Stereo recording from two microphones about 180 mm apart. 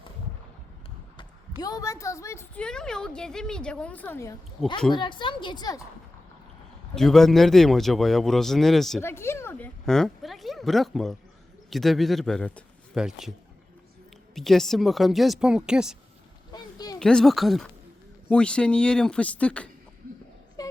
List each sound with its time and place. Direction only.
1.6 s a woman's voice: 20° left (ahead or behind)
2.6 s speech: 5° left (ahead or behind)
4.9 s a woman's voice: 25° left (ahead or behind)
6.9 s speech: centre (ahead or behind)
9.0 s speech: 15° left (ahead or behind); by 13.3 s centre (ahead or behind)
14.3 s speech: centre (ahead or behind)
16.5 s a sound: 20° left (ahead or behind)
17.0 s speech: 5° left (ahead or behind)
20.6 s a sound: 20° left (ahead or behind)